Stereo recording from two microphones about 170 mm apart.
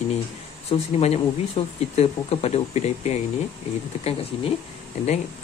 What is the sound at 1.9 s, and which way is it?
Speech, 40° left (ahead or behind).